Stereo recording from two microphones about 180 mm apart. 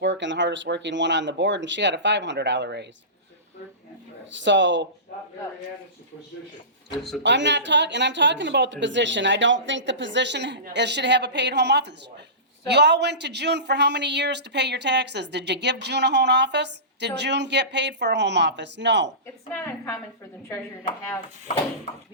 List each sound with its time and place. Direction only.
0.0 s speech: 85° right
4.3 s speech: 85° right
7.2 s speech: 80° right
19.5 s a woman's voice: 15° left (ahead or behind)